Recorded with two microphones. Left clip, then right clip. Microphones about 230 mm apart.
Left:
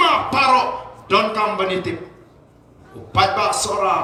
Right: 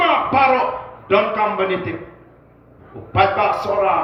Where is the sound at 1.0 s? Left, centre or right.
Left.